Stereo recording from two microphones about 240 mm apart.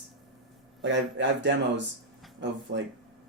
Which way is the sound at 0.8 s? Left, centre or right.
Right.